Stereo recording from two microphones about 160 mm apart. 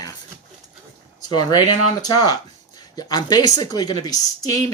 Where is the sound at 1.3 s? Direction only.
25° left (ahead or behind).